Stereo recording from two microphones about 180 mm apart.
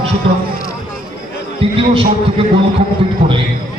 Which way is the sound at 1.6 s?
30° right (ahead or behind).